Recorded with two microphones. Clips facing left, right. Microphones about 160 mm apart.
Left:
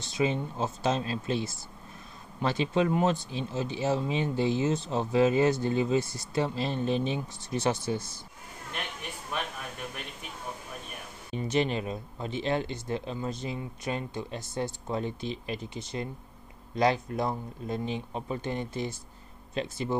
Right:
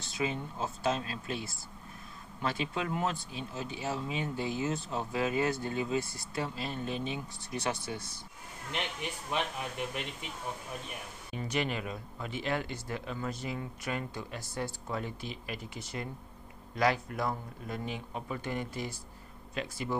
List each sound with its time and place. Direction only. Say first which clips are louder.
0.2 s speech: left 6 dB; 25° left (ahead or behind)
2.4 s speech: left 7 dB; 25° left (ahead or behind)
9.3 s speech: right 1 dB; 20° right (ahead or behind)
11.3 s speech: left 6 dB; 25° left (ahead or behind)